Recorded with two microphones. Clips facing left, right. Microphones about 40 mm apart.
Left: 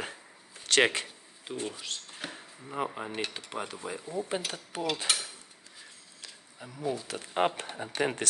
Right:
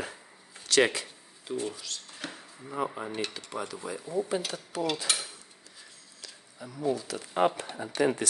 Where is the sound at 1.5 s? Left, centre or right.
Left.